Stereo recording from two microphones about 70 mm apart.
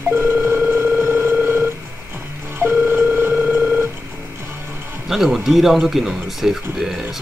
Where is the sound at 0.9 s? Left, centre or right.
Right.